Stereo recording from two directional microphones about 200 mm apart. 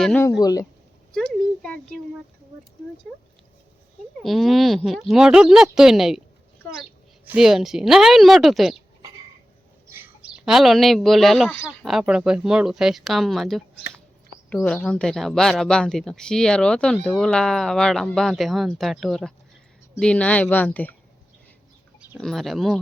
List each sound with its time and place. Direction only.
0.0 s speech: 10° left (ahead or behind)
1.1 s a child's voice: 5° left (ahead or behind)
4.2 s speech: centre (ahead or behind)
7.3 s speech: 5° right (ahead or behind)
9.8 s speech: 10° right (ahead or behind); by 20.9 s 10° left (ahead or behind)
22.2 s speech: centre (ahead or behind)